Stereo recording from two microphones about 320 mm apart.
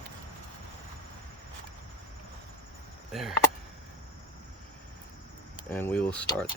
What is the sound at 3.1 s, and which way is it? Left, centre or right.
Speech, centre.